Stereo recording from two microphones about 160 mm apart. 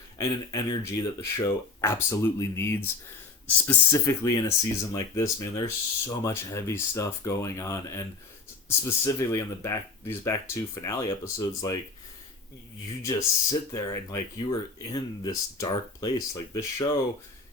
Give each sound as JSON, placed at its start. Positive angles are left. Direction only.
{"t": 0.2, "sound": "speech", "side_deg": 20}
{"t": 9.0, "sound": "speech", "side_deg": 20}
{"t": 13.0, "sound": "speech", "side_deg": 20}